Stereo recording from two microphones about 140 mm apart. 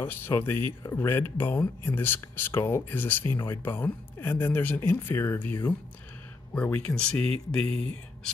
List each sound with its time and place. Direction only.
0.0 s speech: 15° left (ahead or behind)
7.7 s speech: 40° right (ahead or behind)